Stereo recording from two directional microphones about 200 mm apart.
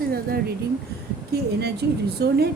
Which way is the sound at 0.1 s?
50° right (ahead or behind).